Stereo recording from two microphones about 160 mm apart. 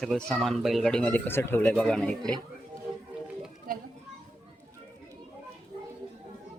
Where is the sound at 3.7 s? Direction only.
65° right (ahead or behind).